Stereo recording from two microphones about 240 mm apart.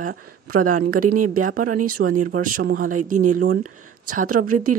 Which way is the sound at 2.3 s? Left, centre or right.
Right.